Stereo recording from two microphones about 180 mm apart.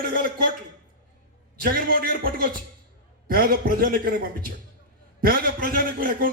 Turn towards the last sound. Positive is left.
turn(degrees=-55)  # may be behind; listen again after turning